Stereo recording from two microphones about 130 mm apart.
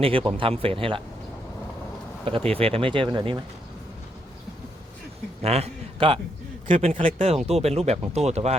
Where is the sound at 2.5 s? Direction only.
50° right (ahead or behind).